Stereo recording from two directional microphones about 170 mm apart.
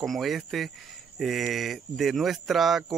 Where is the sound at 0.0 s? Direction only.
Centre (ahead or behind).